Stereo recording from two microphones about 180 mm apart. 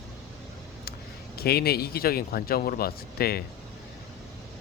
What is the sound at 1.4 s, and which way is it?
Speech, 60° left (ahead or behind).